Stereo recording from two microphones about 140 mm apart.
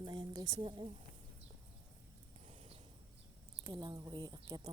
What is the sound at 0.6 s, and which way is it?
Speech, 40° right (ahead or behind).